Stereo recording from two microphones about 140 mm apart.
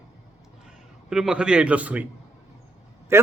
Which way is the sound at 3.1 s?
20° right (ahead or behind).